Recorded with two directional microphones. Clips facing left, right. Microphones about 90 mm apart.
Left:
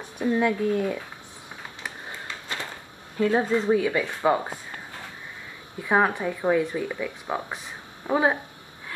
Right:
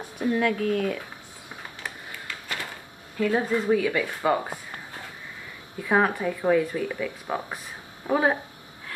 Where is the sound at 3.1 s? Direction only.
25° left (ahead or behind).